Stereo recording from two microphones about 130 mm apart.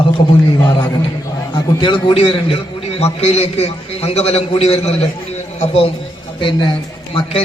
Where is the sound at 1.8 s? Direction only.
40° left (ahead or behind).